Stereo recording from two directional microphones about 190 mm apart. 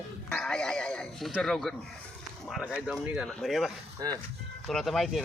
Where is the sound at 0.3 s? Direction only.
5° left (ahead or behind).